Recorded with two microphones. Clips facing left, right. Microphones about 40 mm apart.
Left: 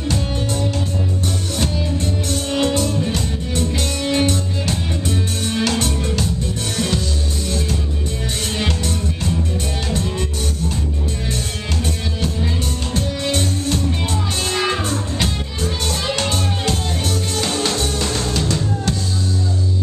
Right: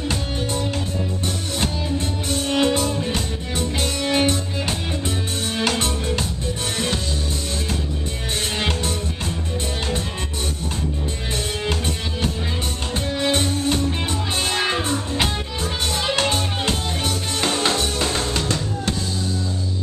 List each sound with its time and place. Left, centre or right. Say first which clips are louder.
0.5 s music: left 2 dB; centre
7.4 s music: left 3 dB; centre
11.3 s music: right 1 dB; centre